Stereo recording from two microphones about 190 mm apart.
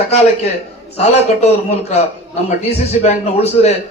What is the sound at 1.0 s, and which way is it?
Speech, 35° left (ahead or behind).